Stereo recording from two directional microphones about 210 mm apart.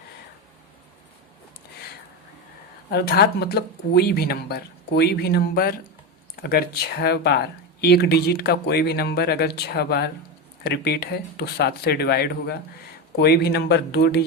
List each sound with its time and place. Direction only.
2.9 s speech: 50° left (ahead or behind)